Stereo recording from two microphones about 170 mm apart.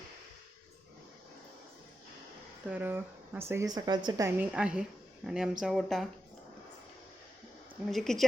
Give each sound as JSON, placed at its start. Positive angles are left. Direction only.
{"t": 2.6, "sound": "speech", "side_deg": -10}
{"t": 4.3, "sound": "a woman's voice", "side_deg": -10}
{"t": 7.9, "sound": "a woman's voice", "side_deg": 0}